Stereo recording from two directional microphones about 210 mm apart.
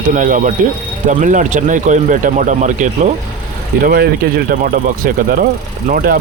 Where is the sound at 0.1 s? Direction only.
40° right (ahead or behind).